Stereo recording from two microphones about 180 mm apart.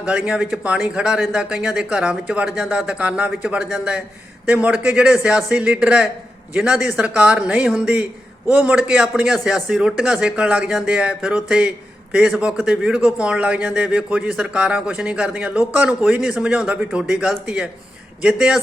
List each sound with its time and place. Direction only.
0.0 s a man's voice: 5° right (ahead or behind)